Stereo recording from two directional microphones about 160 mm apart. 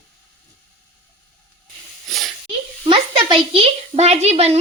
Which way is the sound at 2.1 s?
Centre (ahead or behind).